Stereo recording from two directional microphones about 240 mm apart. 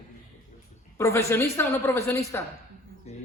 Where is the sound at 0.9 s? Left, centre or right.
Centre.